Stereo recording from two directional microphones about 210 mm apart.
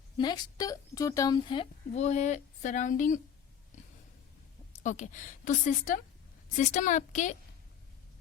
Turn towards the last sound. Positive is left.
turn(degrees=35)  # may be behind; listen again after turning